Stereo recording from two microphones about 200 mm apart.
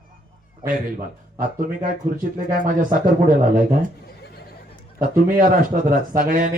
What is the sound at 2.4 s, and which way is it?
A man's voice, 40° right (ahead or behind).